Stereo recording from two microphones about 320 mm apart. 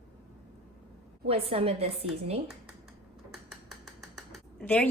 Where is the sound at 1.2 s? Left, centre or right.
Centre.